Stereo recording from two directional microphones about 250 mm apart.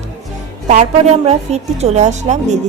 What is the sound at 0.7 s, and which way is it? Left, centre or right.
A woman's voice, right.